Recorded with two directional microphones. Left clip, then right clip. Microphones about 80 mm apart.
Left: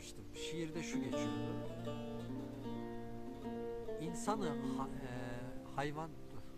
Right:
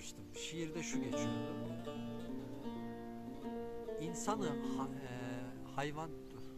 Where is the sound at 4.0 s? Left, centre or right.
Centre.